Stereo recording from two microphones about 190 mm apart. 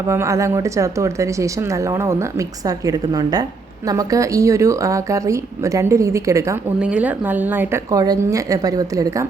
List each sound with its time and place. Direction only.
0.1 s a woman's voice: 15° right (ahead or behind)